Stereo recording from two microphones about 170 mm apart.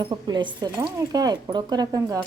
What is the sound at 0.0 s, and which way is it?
Speech, 25° right (ahead or behind).